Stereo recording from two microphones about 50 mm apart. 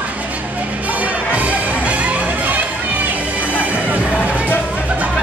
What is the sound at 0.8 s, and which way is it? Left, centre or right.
Music, right.